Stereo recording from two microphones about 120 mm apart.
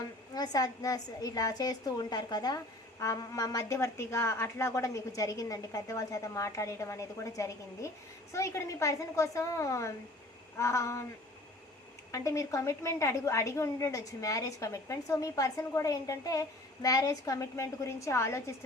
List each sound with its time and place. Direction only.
0.3 s a woman's voice: 30° left (ahead or behind)
12.1 s a woman's voice: 25° left (ahead or behind)